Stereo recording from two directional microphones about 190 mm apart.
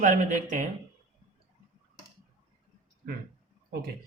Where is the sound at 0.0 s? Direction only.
45° right (ahead or behind).